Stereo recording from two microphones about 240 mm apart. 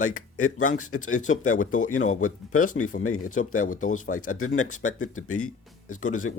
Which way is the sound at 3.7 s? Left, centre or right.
Left.